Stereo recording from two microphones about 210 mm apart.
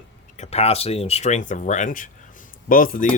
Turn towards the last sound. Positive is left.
turn(degrees=40)  # may be behind; listen again after turning